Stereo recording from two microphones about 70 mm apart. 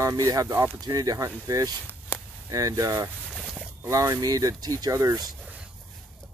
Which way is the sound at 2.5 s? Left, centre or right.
Right.